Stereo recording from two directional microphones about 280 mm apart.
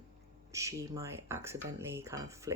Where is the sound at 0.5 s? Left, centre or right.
Centre.